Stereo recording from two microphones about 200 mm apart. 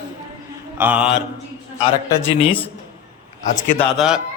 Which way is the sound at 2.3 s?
25° left (ahead or behind).